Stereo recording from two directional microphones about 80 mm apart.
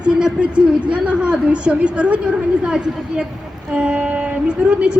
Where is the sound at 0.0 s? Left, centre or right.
Centre.